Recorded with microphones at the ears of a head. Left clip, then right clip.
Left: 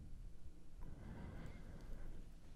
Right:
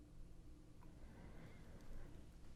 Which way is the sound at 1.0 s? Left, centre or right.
Left.